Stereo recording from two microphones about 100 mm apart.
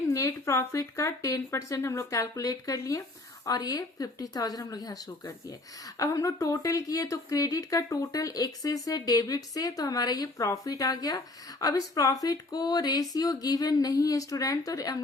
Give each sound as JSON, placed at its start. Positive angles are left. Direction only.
{"t": 0.1, "sound": "speech", "side_deg": 30}